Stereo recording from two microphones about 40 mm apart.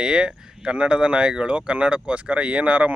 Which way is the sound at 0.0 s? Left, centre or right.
Right.